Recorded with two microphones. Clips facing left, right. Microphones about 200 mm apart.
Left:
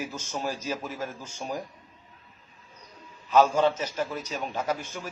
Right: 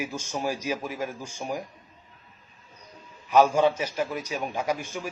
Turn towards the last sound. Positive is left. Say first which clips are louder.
# right 2 dB
turn(degrees=-10)  # may be behind; listen again after turning